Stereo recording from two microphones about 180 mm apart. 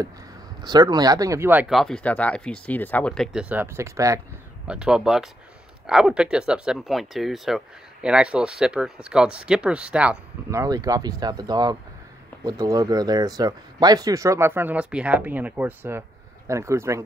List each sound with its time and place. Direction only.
0.7 s speech: 25° right (ahead or behind); by 3.4 s 5° left (ahead or behind)
3.4 s speech: 10° right (ahead or behind)
4.6 s speech: 5° right (ahead or behind)
10.6 s speech: 20° right (ahead or behind)